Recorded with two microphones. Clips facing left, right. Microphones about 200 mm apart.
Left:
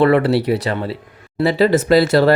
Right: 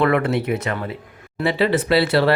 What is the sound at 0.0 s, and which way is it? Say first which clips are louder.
Speech: left 5 dB; 30° left (ahead or behind).